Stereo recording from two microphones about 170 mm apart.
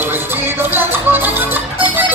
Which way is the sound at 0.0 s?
10° right (ahead or behind).